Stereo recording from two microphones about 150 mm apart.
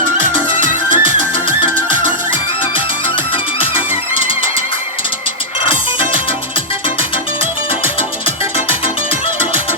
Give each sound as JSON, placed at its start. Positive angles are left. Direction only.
{"t": 0.6, "sound": "music", "side_deg": -55}